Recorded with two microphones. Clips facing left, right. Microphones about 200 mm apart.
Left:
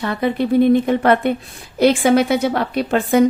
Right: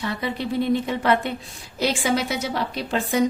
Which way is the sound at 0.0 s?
55° left (ahead or behind).